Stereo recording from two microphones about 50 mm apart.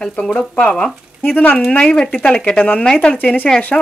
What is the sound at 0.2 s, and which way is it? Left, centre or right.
Speech, centre.